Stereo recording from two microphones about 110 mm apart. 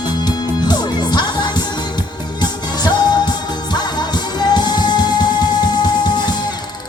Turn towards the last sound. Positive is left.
turn(degrees=40)  # may be behind; listen again after turning